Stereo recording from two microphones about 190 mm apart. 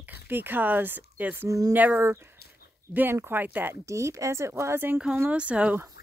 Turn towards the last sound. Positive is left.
turn(degrees=-5)  # may be behind; listen again after turning